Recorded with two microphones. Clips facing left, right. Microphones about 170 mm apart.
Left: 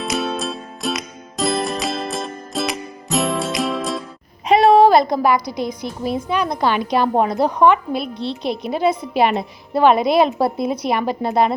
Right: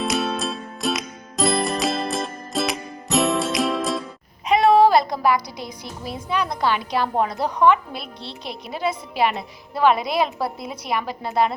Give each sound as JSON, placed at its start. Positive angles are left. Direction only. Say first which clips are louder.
{"t": 0.0, "sound": "music", "louder": "left 1 dB", "side_deg": 0}
{"t": 4.4, "sound": "a woman's voice", "louder": "left 3 dB", "side_deg": 30}